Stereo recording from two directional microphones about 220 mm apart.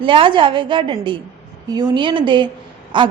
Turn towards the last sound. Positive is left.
turn(degrees=-20)  # may be behind; listen again after turning